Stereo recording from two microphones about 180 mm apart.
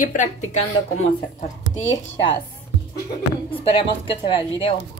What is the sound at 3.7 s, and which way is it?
Speech, 30° left (ahead or behind).